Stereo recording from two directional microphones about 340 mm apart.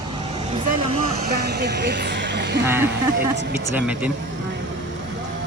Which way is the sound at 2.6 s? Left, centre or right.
Centre.